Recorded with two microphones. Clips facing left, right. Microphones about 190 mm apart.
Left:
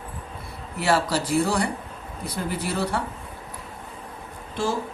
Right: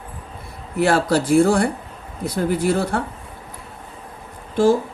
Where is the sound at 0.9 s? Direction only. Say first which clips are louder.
Right 5 dB; 50° right (ahead or behind).